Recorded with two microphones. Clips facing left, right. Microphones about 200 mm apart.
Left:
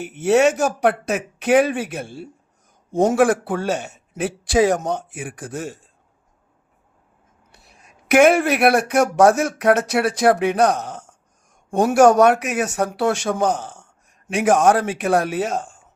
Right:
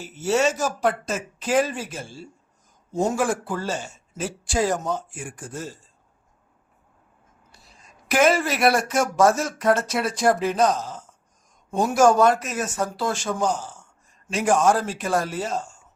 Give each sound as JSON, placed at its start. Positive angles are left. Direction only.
{"t": 0.0, "sound": "speech", "side_deg": 60}
{"t": 3.0, "sound": "speech", "side_deg": 85}
{"t": 7.5, "sound": "speech", "side_deg": 65}